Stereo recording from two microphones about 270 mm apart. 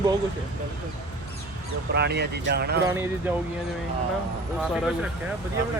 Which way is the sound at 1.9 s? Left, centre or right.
Right.